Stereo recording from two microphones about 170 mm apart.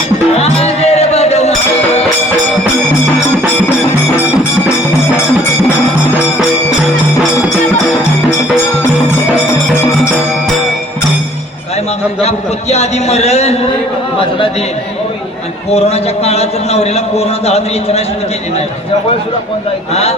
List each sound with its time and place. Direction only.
0.3 s music: 35° left (ahead or behind)
12.2 s a sound: 40° left (ahead or behind)
15.7 s a man's voice: 40° left (ahead or behind)
19.9 s a man's voice: 40° left (ahead or behind)